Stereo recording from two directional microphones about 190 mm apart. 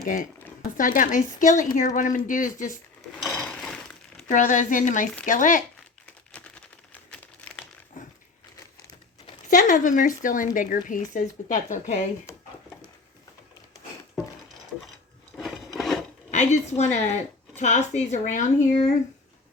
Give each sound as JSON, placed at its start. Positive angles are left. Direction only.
{"t": 0.0, "sound": "speech", "side_deg": 45}
{"t": 3.3, "sound": "breaking", "side_deg": 5}
{"t": 4.3, "sound": "speech", "side_deg": 40}
{"t": 6.3, "sound": "crumpling", "side_deg": 5}
{"t": 9.5, "sound": "speech", "side_deg": 40}
{"t": 15.4, "sound": "rub", "side_deg": 0}
{"t": 16.3, "sound": "speech", "side_deg": 35}